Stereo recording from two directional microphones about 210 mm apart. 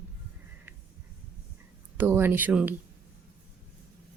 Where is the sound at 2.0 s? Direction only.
10° right (ahead or behind).